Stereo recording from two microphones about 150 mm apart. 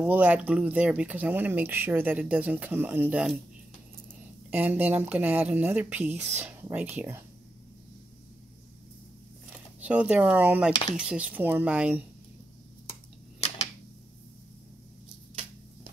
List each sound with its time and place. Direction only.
0.0 s speech: 10° right (ahead or behind)
4.5 s speech: 10° right (ahead or behind)
9.8 s speech: 10° right (ahead or behind)